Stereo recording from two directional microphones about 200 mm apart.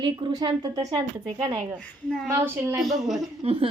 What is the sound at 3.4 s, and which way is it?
Speech, 30° right (ahead or behind).